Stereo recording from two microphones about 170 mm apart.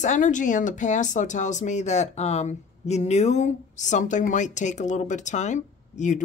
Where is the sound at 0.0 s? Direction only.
45° left (ahead or behind).